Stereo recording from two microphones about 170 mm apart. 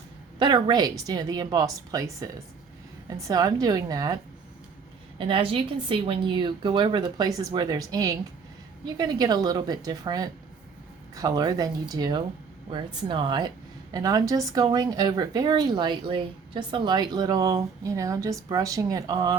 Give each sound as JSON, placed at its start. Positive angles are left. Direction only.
{"t": 0.3, "sound": "speech", "side_deg": -25}
{"t": 5.1, "sound": "speech", "side_deg": -30}